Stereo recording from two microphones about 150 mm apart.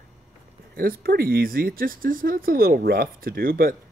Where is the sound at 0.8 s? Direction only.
85° right.